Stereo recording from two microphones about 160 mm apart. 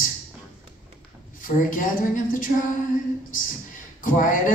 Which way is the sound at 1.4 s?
55° left (ahead or behind).